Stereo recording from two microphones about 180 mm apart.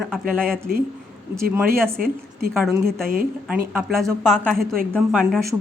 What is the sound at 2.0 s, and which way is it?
Speech, 55° right (ahead or behind).